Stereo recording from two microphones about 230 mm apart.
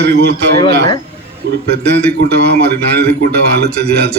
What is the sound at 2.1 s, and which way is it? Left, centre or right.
A man's voice, right.